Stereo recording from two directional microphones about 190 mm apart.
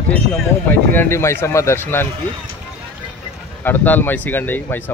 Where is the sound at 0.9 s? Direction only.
15° left (ahead or behind).